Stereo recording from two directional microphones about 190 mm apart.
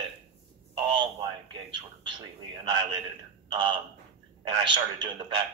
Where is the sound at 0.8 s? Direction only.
25° right (ahead or behind).